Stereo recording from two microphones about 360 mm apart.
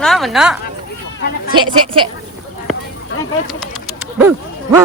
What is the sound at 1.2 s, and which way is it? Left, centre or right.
Speech, left.